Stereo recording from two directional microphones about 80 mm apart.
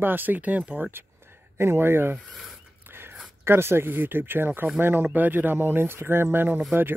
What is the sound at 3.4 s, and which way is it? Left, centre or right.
Speech, right.